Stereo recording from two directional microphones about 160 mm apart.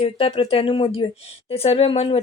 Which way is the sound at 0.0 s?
40° left (ahead or behind).